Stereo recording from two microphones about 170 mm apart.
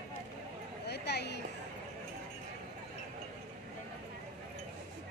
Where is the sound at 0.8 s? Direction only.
75° left (ahead or behind).